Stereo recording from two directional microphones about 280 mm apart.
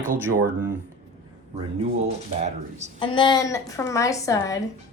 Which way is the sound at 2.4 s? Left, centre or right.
Right.